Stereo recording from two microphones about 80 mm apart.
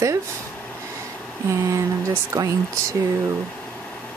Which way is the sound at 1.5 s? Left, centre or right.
Right.